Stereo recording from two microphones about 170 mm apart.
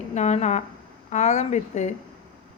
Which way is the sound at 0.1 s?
40° left (ahead or behind).